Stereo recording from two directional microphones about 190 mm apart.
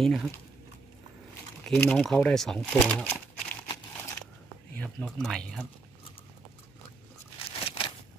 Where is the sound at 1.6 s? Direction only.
5° left (ahead or behind).